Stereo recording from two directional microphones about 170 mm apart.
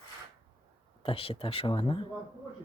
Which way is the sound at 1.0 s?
35° left (ahead or behind).